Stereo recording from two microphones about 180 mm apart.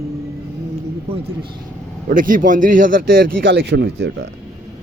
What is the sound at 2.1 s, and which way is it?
Speech, 50° right (ahead or behind).